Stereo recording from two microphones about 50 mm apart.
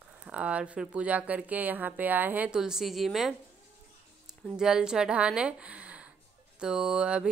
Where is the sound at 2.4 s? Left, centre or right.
Centre.